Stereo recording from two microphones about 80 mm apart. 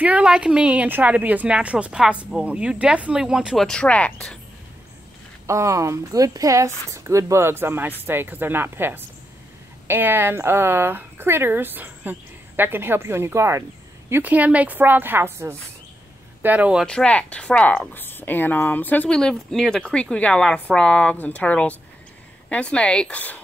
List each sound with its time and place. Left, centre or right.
0.0 s a woman's voice: centre
3.5 s a woman's voice: centre
5.5 s a woman's voice: right
14.2 s a woman's voice: centre
16.4 s a woman's voice: centre
16.8 s a woman's voice: centre
17.9 s speech: left
19.1 s a woman's voice: centre